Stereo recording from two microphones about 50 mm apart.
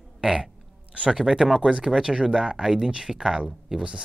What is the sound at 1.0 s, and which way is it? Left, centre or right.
Speech, centre.